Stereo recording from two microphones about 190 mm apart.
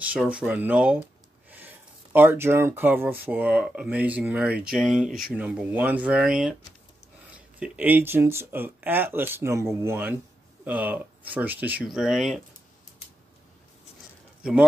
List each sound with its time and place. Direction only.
0.0 s speech: 5° right (ahead or behind)
7.5 s speech: 5° right (ahead or behind)
14.4 s speech: 5° right (ahead or behind)